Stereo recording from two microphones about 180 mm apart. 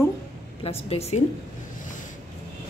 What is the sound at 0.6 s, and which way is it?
Speech, 35° left (ahead or behind).